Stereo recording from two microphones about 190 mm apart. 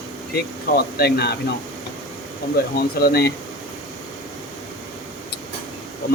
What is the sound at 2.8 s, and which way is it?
Speech, 55° left (ahead or behind).